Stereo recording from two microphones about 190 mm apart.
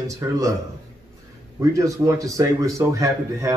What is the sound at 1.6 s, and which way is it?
A man's voice, 15° right (ahead or behind).